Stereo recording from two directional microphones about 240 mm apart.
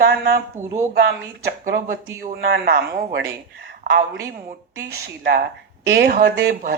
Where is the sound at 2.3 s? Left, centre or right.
Right.